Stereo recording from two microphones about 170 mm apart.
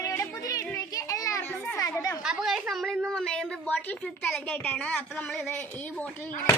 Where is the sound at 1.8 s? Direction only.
20° left (ahead or behind).